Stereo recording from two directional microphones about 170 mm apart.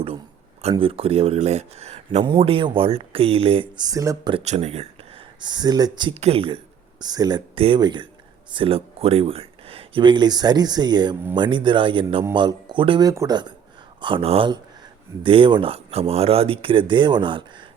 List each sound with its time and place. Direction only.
0.8 s speech: 35° right (ahead or behind)
4.4 s speech: 40° right (ahead or behind); by 6.1 s 25° right (ahead or behind)
6.1 s speech: 35° right (ahead or behind)